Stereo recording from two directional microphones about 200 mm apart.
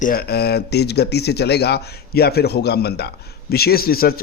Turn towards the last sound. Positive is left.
turn(degrees=50)  # may be behind; listen again after turning